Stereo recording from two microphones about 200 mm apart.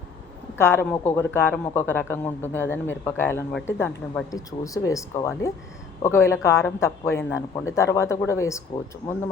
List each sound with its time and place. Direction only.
0.6 s speech: 10° left (ahead or behind)